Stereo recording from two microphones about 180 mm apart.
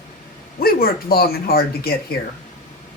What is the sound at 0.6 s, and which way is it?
Speech, 55° left (ahead or behind).